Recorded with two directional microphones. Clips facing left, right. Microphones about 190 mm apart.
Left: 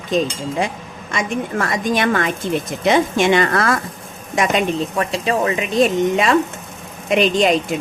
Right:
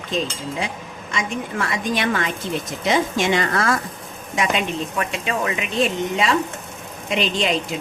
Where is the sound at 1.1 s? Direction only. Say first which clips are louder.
Left 4 dB; 45° left (ahead or behind); by 3.7 s 60° left (ahead or behind).